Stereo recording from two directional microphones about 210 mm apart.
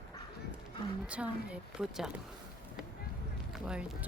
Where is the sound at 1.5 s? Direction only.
5° right (ahead or behind).